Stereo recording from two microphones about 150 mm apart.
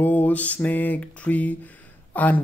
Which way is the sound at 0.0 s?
10° left (ahead or behind).